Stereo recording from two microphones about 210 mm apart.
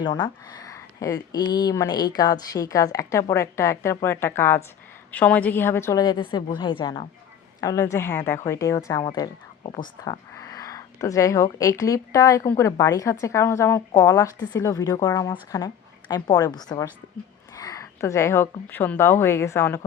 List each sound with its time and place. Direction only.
0.0 s a woman's voice: 20° left (ahead or behind)
10.0 s a sound: 15° left (ahead or behind)
11.5 s a woman's voice: 15° left (ahead or behind)